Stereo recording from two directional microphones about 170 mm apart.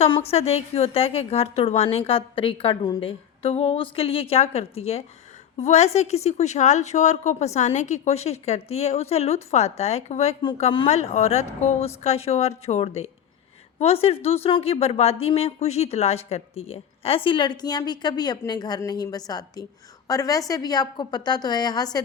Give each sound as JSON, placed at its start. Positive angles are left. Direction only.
{"t": 0.0, "sound": "a woman's voice", "side_deg": 35}